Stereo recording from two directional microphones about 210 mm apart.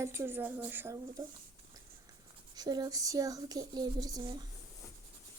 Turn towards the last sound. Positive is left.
turn(degrees=-20)  # may be behind; listen again after turning